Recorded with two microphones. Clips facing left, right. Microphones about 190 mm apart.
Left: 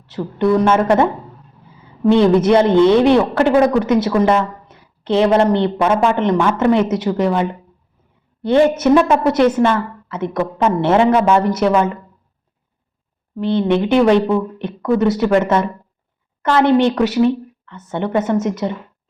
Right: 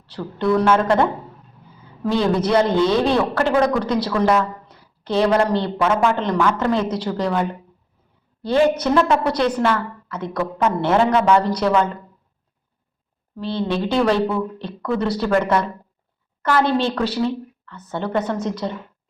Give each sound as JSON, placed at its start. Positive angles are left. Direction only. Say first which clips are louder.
{"t": 0.1, "sound": "a man's voice", "louder": "left 4 dB", "side_deg": 20}
{"t": 2.0, "sound": "a man's voice", "louder": "left 7 dB", "side_deg": 20}
{"t": 13.4, "sound": "a man's voice", "louder": "left 7 dB", "side_deg": 20}